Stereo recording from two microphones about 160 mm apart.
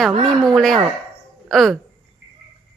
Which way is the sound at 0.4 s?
Centre (ahead or behind).